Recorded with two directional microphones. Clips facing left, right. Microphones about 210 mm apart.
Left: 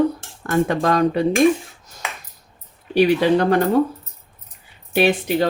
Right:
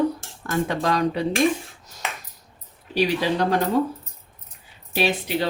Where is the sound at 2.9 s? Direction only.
55° left (ahead or behind).